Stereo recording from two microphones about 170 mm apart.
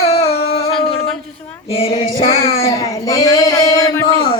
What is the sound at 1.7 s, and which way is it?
Female singing, 35° left (ahead or behind).